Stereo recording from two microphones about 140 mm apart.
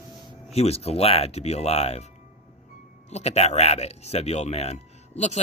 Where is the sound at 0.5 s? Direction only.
45° left (ahead or behind).